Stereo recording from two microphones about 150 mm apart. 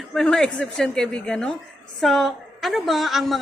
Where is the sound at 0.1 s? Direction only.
5° left (ahead or behind).